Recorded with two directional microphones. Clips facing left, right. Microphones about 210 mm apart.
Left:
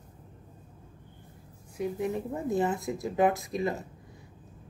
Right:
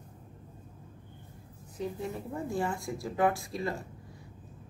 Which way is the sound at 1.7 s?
15° left (ahead or behind).